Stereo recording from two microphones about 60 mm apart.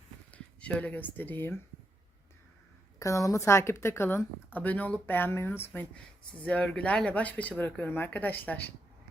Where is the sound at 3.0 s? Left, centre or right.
Left.